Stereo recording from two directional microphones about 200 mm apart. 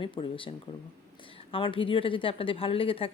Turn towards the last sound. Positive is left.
turn(degrees=25)  # may be behind; listen again after turning